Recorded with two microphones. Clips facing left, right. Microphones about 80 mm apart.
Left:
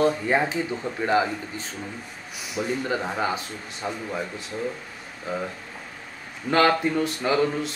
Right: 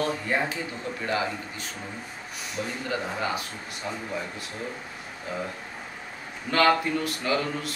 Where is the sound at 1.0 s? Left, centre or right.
Left.